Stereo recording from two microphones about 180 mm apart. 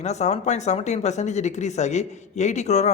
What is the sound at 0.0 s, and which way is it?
Speech, 40° left (ahead or behind).